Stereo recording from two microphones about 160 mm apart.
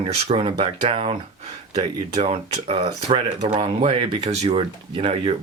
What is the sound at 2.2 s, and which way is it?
Speech, 40° right (ahead or behind).